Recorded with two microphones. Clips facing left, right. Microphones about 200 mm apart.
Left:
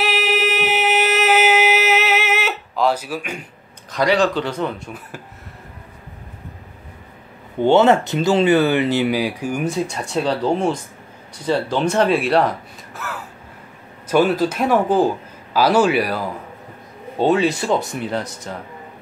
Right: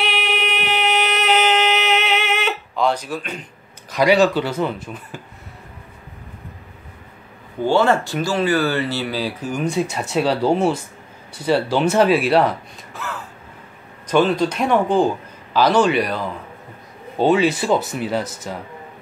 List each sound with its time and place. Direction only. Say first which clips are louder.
0.0 s a sound: left 3 dB; 5° left (ahead or behind)
3.9 s speech: right 2 dB; 10° right (ahead or behind)
7.6 s speech: left 3 dB; 20° left (ahead or behind)
9.7 s a man's voice: right 1 dB; 5° right (ahead or behind)